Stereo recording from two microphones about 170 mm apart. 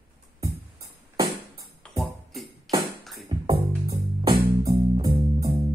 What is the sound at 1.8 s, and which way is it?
Music, centre (ahead or behind).